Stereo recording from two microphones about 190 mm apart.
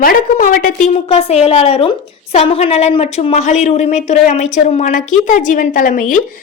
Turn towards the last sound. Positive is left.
turn(degrees=45)  # may be behind; listen again after turning